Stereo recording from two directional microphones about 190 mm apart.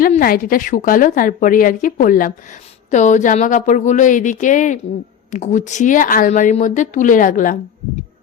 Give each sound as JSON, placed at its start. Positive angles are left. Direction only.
{"t": 0.0, "sound": "a woman's voice", "side_deg": 50}